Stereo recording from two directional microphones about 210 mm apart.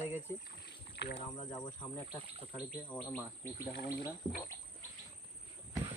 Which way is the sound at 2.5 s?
5° left (ahead or behind).